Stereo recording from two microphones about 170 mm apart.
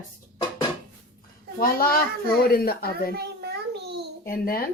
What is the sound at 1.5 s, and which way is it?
Speech, 60° left (ahead or behind).